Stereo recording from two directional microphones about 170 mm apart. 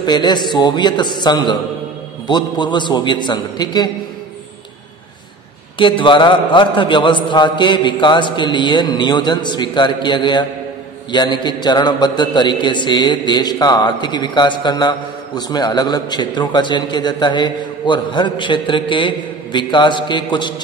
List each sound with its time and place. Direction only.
0.0 s a man's voice: 25° left (ahead or behind)
5.8 s a man's voice: 30° left (ahead or behind)